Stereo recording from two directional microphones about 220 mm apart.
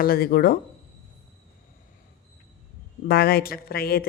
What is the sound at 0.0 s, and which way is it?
Speech, 40° left (ahead or behind).